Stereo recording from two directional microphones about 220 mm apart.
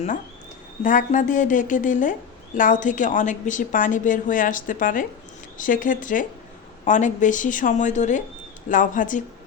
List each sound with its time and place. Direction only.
0.9 s a woman's voice: 35° left (ahead or behind)